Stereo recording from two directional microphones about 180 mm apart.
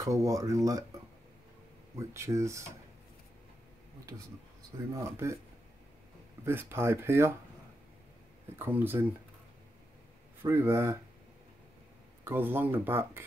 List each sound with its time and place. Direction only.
0.0 s speech: 20° right (ahead or behind)
2.0 s speech: 15° right (ahead or behind)
4.9 s speech: 15° right (ahead or behind)
6.4 s speech: 15° right (ahead or behind)
8.5 s speech: 10° right (ahead or behind)
10.4 s speech: 15° right (ahead or behind)
12.3 s speech: 10° right (ahead or behind)